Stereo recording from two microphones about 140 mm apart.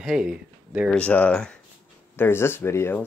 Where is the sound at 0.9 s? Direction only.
10° left (ahead or behind).